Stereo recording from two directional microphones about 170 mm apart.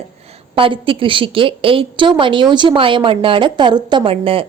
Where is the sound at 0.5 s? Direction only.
30° right (ahead or behind).